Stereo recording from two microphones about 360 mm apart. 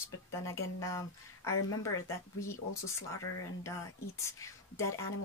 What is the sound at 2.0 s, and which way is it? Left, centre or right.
A woman's voice, centre.